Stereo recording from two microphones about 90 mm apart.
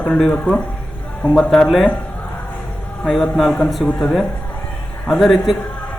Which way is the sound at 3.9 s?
15° left (ahead or behind).